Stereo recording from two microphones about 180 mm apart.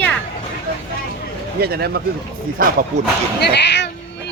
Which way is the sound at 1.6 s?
60° right (ahead or behind).